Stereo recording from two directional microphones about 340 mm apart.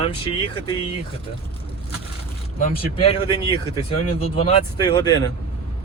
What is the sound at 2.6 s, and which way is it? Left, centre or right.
Speech, centre.